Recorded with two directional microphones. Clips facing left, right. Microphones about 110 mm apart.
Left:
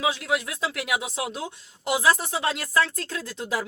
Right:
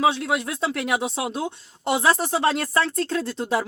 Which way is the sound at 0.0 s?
30° right (ahead or behind).